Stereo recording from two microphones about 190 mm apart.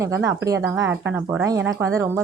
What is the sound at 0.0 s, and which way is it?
Speech, 15° right (ahead or behind).